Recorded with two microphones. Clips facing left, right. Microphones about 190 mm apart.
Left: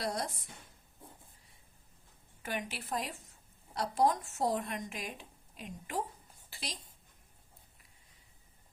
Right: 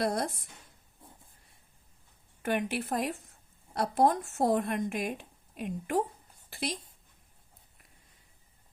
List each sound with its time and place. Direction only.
0.0 s speech: 55° right (ahead or behind)
2.4 s a woman's voice: 60° right (ahead or behind)